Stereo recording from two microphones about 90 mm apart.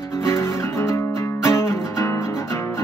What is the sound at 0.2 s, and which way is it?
Music, 30° left (ahead or behind).